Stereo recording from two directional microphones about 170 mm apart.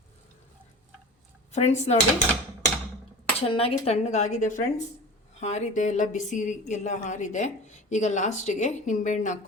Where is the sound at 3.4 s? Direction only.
35° left (ahead or behind).